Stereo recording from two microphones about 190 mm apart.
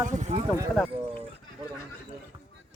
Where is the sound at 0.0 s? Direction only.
40° right (ahead or behind).